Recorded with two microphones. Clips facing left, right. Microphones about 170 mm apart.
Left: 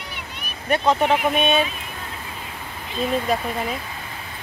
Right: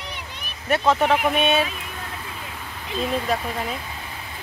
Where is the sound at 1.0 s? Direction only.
5° right (ahead or behind).